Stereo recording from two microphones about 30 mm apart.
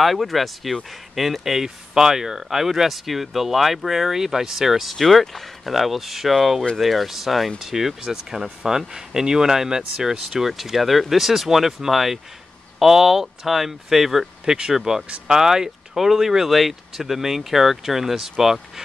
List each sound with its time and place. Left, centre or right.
0.0 s speech: centre
4.9 s speech: centre
5.7 s speech: centre
14.4 s speech: right
14.7 s speech: centre
16.4 s speech: centre